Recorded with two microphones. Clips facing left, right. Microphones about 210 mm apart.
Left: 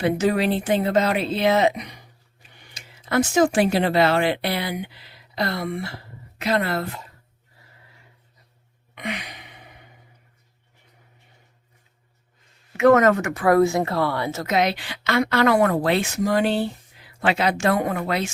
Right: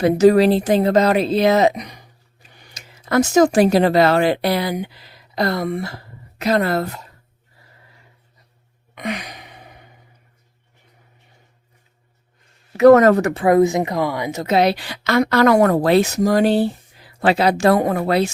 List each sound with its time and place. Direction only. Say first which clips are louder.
0.0 s a woman's voice: right 8 dB; 40° right (ahead or behind)
9.0 s sigh: right 5 dB; 40° right (ahead or behind)
12.7 s a woman's voice: right 6 dB; 35° right (ahead or behind)
13.4 s speech: right 1 dB; 20° right (ahead or behind)
14.4 s a woman's voice: right 7 dB; 35° right (ahead or behind)